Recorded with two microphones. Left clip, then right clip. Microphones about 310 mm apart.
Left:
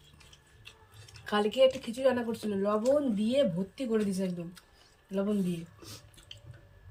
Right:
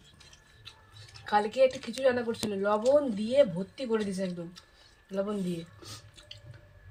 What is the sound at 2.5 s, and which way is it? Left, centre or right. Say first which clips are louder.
Speech: right 3 dB; centre.